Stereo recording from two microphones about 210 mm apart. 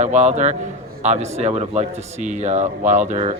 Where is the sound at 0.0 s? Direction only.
35° right (ahead or behind).